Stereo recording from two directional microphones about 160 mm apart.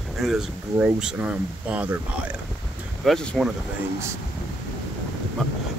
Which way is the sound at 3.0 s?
5° left (ahead or behind).